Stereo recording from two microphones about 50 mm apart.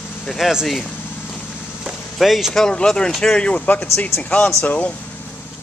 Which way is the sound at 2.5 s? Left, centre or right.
Centre.